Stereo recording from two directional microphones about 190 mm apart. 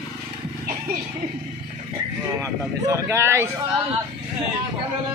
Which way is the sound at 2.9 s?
15° right (ahead or behind).